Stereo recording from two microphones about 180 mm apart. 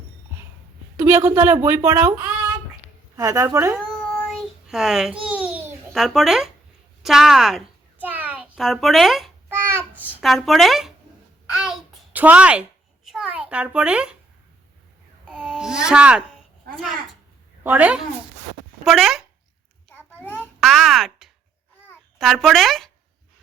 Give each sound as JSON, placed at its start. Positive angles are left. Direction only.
{"t": 0.9, "sound": "a woman's voice", "side_deg": -10}
{"t": 3.8, "sound": "child singing", "side_deg": 0}
{"t": 5.2, "sound": "babbling", "side_deg": -10}
{"t": 7.0, "sound": "a sound", "side_deg": 0}
{"t": 9.5, "sound": "babbling", "side_deg": -10}
{"t": 11.5, "sound": "a sound", "side_deg": -5}
{"t": 15.2, "sound": "babbling", "side_deg": -5}
{"t": 17.6, "sound": "a woman's voice", "side_deg": -10}
{"t": 20.1, "sound": "babbling", "side_deg": 10}
{"t": 20.6, "sound": "a sound", "side_deg": 0}
{"t": 21.8, "sound": "a child's voice", "side_deg": 5}